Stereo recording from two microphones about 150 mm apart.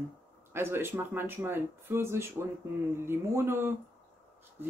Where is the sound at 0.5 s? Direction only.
15° right (ahead or behind).